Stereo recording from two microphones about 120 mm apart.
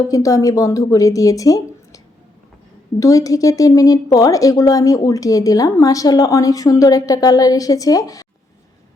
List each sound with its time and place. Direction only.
0.1 s speech: 30° left (ahead or behind)
3.0 s speech: 30° left (ahead or behind)